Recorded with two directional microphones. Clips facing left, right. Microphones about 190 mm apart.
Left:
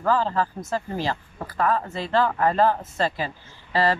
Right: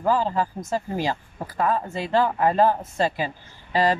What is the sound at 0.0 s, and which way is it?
A woman's voice, 10° right (ahead or behind).